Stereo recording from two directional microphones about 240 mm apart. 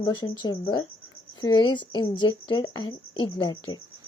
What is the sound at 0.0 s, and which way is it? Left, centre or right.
Speech, centre.